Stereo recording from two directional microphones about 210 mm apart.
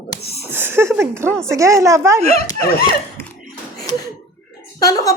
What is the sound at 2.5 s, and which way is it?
Speech, 15° left (ahead or behind).